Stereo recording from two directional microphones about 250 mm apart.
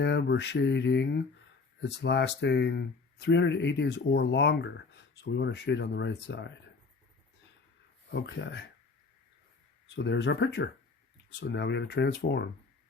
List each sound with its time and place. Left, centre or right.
0.0 s speech: left
8.1 s speech: left
9.9 s speech: left